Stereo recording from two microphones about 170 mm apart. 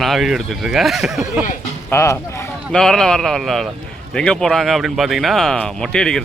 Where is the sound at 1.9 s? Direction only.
15° left (ahead or behind).